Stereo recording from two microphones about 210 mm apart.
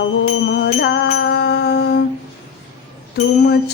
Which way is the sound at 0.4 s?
50° left (ahead or behind).